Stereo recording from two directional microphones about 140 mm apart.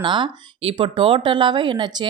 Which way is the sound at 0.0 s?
35° right (ahead or behind).